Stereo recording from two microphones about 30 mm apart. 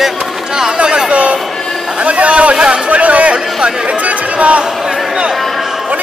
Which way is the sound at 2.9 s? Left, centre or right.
Right.